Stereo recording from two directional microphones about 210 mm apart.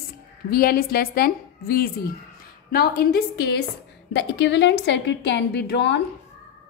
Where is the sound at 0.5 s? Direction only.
45° left (ahead or behind).